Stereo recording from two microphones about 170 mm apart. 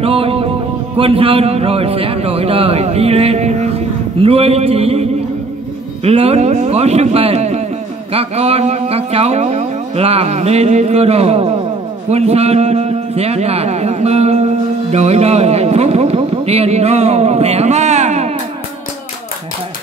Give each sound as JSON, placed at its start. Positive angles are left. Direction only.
{"t": 0.0, "sound": "music", "side_deg": -35}
{"t": 0.9, "sound": "speech", "side_deg": -35}
{"t": 6.0, "sound": "a man's voice", "side_deg": -35}